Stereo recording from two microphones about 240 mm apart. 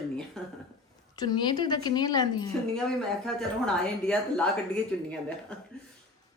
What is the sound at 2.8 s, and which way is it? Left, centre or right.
A woman's voice, centre.